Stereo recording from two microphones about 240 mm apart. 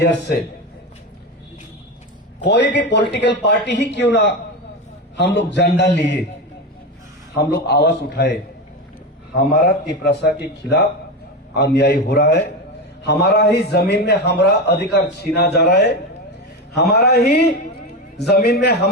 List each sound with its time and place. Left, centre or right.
0.0 s speech: left
2.4 s speech: left
7.3 s speech: left
9.6 s speech: left